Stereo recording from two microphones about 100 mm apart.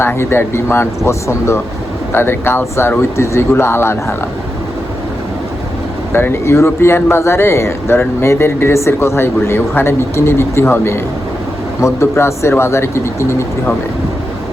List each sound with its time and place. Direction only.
0.0 s a man's voice: 25° left (ahead or behind)
6.1 s a man's voice: 25° left (ahead or behind)